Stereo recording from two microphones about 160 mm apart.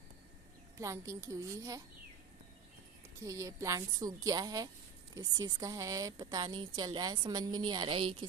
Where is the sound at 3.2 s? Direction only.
20° right (ahead or behind).